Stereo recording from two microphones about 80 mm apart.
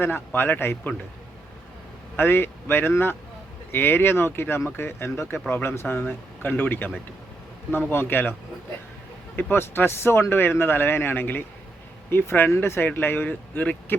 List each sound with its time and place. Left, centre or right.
0.0 s speech: left
2.1 s speech: left